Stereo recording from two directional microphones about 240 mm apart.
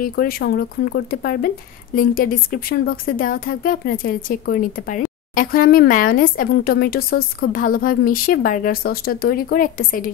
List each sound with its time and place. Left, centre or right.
0.0 s a woman's voice: left